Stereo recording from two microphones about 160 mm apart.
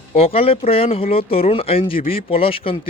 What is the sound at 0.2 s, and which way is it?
Speech, 35° left (ahead or behind).